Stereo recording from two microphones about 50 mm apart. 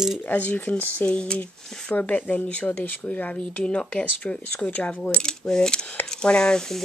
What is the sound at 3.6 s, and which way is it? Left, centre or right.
Speech, centre.